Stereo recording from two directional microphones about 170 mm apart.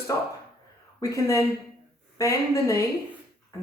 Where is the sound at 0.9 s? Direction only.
20° left (ahead or behind).